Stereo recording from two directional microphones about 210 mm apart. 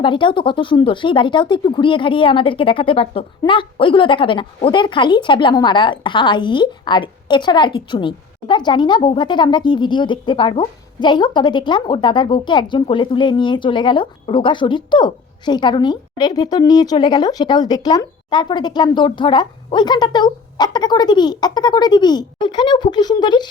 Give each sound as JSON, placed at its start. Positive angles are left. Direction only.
{"t": 0.0, "sound": "speech", "side_deg": 25}